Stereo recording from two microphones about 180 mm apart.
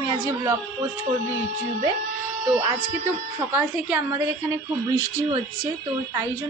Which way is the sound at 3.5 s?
10° right (ahead or behind).